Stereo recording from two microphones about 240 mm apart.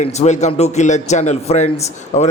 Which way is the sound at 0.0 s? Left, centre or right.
Left.